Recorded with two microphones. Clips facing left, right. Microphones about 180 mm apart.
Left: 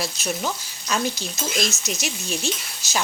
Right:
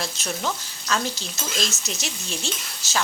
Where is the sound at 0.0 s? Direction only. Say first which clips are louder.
Left 2 dB; 10° left (ahead or behind).